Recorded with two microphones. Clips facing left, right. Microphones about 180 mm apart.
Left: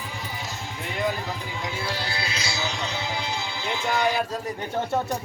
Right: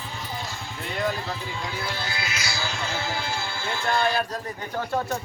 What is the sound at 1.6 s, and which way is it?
Speech, 30° left (ahead or behind).